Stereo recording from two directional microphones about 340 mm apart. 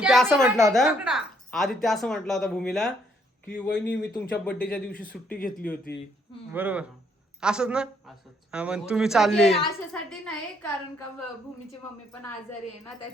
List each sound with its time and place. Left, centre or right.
0.0 s a sound: centre
0.3 s a woman's voice: centre
4.1 s a woman's voice: centre
5.9 s speech: left
6.5 s a woman's voice: centre